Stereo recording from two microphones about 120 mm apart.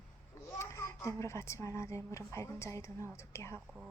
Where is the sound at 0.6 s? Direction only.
25° left (ahead or behind).